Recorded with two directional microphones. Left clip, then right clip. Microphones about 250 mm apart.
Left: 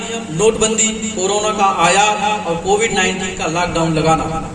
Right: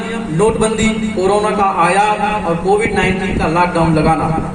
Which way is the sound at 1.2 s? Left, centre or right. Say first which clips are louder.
Right 2 dB; left.